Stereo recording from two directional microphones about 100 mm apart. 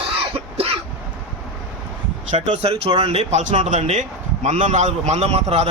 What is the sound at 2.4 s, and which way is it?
Speech, 75° right (ahead or behind).